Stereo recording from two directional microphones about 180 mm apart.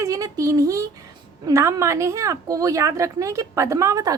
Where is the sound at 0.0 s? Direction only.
20° right (ahead or behind).